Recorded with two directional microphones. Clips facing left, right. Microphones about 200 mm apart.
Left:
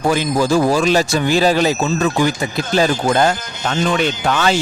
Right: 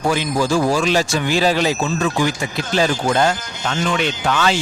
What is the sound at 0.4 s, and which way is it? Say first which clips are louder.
Speech: left 3 dB; 40° left (ahead or behind).